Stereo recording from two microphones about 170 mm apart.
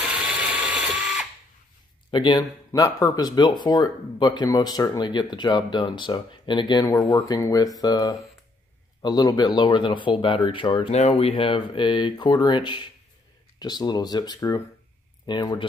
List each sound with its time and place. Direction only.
0.0 s mechanisms: 5° right (ahead or behind)
2.0 s speech: 25° left (ahead or behind)